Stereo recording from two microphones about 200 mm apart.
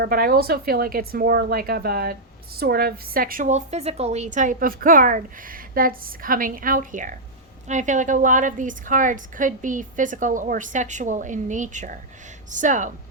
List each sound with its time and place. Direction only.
0.0 s a woman's voice: 45° right (ahead or behind)